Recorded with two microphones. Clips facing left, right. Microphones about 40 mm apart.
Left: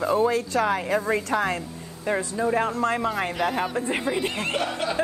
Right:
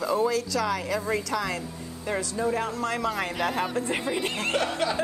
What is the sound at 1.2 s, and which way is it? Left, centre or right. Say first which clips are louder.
Speech: left 4 dB; left.